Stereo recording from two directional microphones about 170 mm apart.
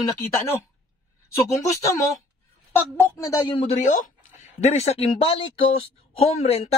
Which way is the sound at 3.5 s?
35° left (ahead or behind).